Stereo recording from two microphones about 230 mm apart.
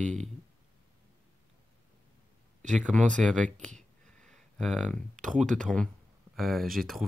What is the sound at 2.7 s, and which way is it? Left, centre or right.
Speech, centre.